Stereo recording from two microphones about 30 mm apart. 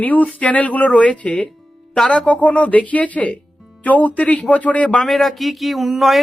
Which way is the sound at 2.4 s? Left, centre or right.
Left.